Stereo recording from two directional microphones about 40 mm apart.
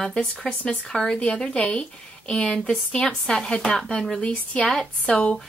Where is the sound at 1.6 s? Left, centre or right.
Left.